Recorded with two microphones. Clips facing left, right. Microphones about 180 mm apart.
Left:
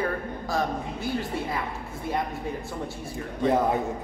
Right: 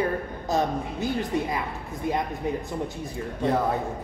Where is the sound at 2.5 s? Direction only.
20° right (ahead or behind).